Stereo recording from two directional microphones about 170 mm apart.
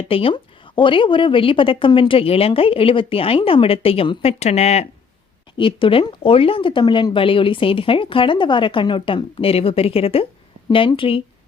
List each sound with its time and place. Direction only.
0.0 s speech: 30° left (ahead or behind)
5.5 s speech: 30° left (ahead or behind)